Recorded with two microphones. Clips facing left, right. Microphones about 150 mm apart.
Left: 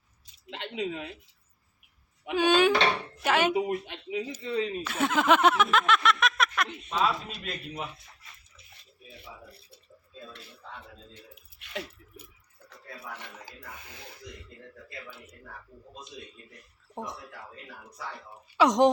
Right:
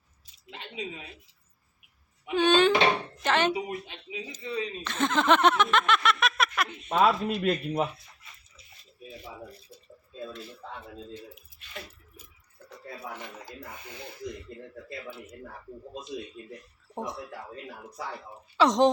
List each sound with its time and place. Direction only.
0.5 s speech: 70° left (ahead or behind)
2.3 s speech: 10° left (ahead or behind)
3.5 s speech: 55° left (ahead or behind)
4.8 s a sound: 10° left (ahead or behind)
6.8 s speech: 60° right (ahead or behind)
9.5 s a sound: 60° left (ahead or behind)
11.7 s a sound: 75° left (ahead or behind)
13.7 s speech: centre (ahead or behind)
16.9 s speech: centre (ahead or behind)
18.5 s speech: 10° left (ahead or behind)